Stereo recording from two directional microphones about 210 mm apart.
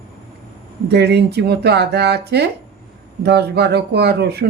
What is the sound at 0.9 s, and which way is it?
Speech, 50° right (ahead or behind).